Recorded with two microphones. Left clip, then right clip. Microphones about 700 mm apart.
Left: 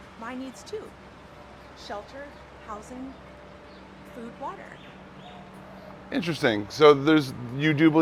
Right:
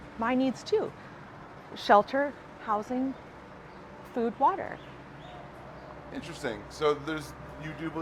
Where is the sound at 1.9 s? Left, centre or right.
Right.